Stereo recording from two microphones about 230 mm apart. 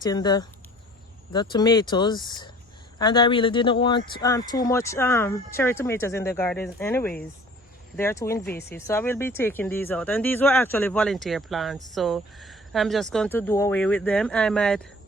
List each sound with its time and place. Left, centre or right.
0.0 s speech: centre